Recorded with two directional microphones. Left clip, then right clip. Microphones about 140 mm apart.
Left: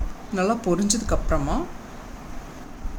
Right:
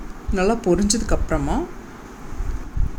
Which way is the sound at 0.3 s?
15° right (ahead or behind).